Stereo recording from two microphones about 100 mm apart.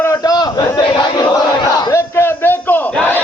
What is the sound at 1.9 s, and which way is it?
Battle cry, 25° left (ahead or behind).